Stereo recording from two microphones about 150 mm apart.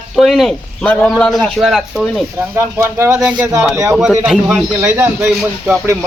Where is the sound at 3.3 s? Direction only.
25° right (ahead or behind).